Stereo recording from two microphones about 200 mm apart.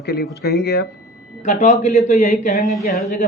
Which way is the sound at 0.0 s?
55° left (ahead or behind).